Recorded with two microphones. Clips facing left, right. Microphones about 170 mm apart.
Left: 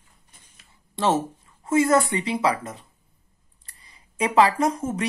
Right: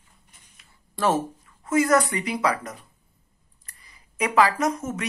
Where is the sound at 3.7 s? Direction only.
30° left (ahead or behind).